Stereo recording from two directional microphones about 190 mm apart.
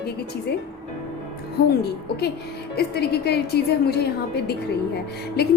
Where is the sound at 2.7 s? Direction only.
55° left (ahead or behind).